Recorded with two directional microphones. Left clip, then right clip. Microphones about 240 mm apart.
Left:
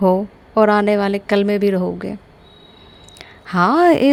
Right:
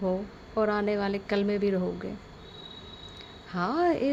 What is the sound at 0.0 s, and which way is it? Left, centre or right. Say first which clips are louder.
Speech: left 14 dB; left.